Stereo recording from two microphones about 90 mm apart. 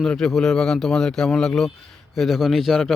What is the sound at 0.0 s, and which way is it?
A man's voice, 5° left (ahead or behind).